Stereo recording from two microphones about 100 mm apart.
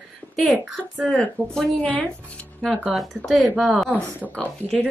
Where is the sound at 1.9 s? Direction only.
15° left (ahead or behind).